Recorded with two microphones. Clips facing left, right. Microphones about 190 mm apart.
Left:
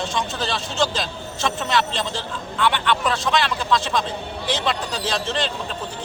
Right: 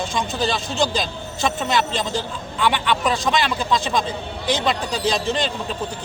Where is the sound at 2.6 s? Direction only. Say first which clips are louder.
Right 1 dB; 5° right (ahead or behind).